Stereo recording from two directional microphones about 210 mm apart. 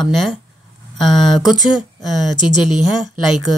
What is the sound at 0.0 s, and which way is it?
Speech, centre (ahead or behind).